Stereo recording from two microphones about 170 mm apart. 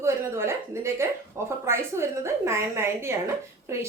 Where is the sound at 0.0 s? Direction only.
15° right (ahead or behind).